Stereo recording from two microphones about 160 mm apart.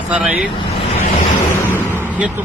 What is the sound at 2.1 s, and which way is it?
Speech, 10° right (ahead or behind).